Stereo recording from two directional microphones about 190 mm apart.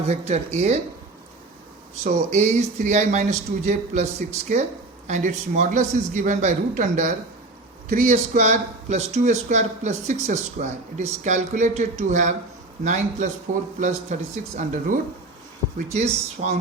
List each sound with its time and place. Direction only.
0.0 s speech: 35° right (ahead or behind)
2.0 s speech: 40° right (ahead or behind)
8.1 s speech: 35° right (ahead or behind)